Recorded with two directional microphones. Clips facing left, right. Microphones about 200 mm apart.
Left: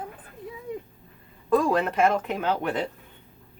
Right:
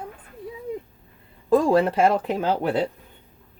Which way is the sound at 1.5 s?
30° right (ahead or behind).